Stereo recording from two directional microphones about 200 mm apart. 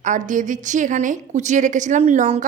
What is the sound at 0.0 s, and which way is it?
A woman's voice, 40° right (ahead or behind).